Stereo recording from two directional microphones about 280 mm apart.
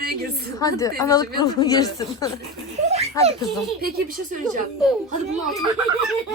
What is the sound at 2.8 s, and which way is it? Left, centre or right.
A woman's voice, right.